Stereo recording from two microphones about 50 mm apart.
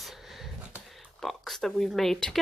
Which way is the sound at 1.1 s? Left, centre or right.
Centre.